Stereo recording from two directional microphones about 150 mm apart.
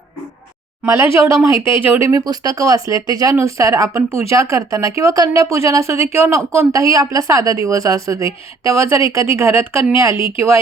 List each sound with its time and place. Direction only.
0.9 s a woman's voice: 15° right (ahead or behind)